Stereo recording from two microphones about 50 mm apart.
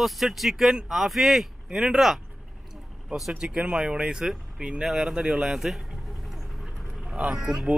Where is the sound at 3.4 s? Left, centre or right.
Right.